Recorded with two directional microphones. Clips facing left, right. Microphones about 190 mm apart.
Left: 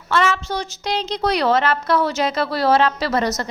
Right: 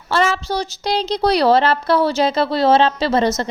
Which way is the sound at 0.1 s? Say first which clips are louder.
Right 2 dB; 35° right (ahead or behind).